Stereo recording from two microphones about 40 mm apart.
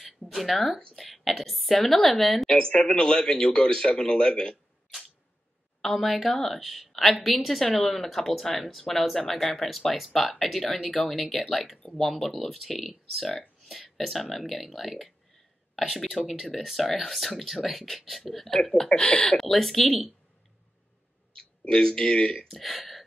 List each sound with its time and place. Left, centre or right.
0.2 s speech: centre
2.5 s a man's voice: centre
5.8 s speech: centre
18.9 s speech: left
19.2 s speech: centre
21.4 s speech: centre